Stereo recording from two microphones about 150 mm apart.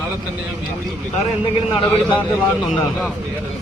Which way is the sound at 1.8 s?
35° left (ahead or behind).